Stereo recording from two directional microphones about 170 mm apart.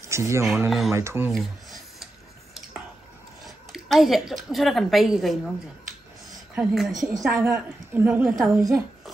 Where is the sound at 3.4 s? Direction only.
Centre (ahead or behind).